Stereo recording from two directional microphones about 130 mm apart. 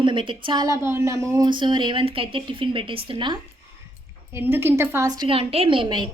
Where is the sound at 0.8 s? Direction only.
20° right (ahead or behind); by 3.4 s 40° right (ahead or behind).